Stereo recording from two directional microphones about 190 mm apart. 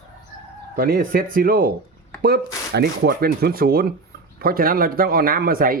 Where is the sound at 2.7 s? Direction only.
55° right (ahead or behind).